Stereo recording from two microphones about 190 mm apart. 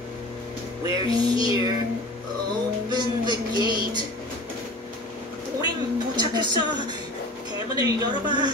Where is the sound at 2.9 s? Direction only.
25° right (ahead or behind).